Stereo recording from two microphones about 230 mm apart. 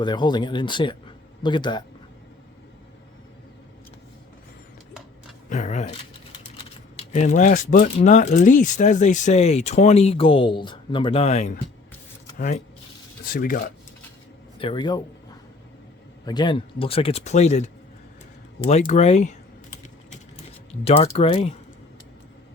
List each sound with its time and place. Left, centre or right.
0.0 s speech: centre
5.5 s speech: left
7.1 s speech: left
14.6 s speech: left
16.2 s speech: centre
20.8 s speech: left